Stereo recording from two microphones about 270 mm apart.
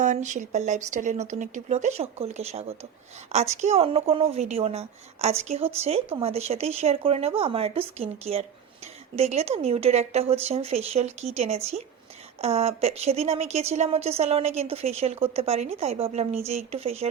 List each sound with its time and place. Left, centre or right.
0.0 s a woman's voice: right